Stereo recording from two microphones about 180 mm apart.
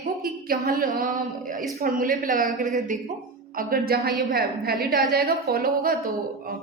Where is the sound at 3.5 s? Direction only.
55° right (ahead or behind).